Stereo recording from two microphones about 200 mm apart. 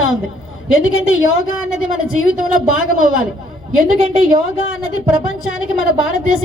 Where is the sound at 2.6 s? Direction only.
90° left.